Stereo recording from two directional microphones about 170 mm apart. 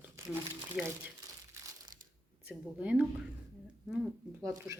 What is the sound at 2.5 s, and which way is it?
Speech, 10° right (ahead or behind).